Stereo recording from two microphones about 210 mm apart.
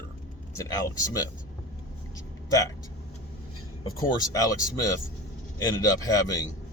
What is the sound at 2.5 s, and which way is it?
Speech, 15° left (ahead or behind).